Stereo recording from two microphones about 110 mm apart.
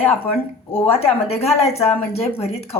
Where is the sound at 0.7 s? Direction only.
65° left (ahead or behind).